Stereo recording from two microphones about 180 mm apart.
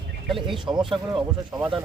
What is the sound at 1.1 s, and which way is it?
Speech, 25° right (ahead or behind).